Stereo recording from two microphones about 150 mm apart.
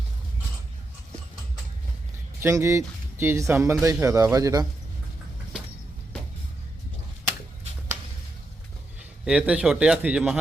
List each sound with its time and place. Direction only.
2.4 s speech: 20° right (ahead or behind)
9.2 s a man's voice: 5° right (ahead or behind)